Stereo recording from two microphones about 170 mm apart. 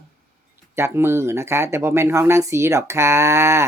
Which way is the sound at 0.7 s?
15° right (ahead or behind).